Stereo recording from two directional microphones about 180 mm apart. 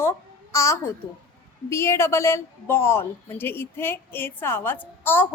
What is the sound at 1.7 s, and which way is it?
A woman's voice, 15° left (ahead or behind).